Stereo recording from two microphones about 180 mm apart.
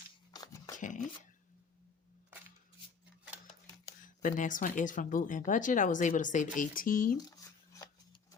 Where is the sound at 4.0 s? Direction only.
50° left (ahead or behind).